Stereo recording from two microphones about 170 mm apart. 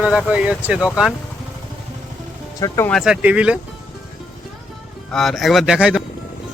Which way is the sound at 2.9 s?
5° right (ahead or behind).